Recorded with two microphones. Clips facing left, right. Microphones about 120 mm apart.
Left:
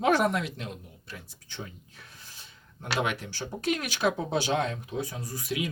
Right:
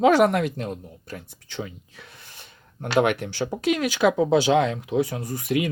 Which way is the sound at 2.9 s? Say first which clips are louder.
Right 10 dB; 60° right (ahead or behind).